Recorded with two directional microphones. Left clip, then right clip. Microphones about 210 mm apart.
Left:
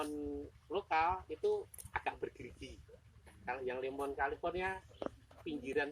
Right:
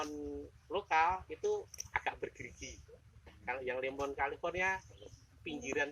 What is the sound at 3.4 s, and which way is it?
Speech, 15° left (ahead or behind).